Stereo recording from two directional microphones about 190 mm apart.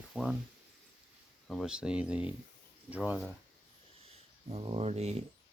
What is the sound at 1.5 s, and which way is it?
Speech, centre (ahead or behind).